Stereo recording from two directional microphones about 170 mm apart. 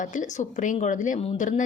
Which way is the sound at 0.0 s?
50° left (ahead or behind).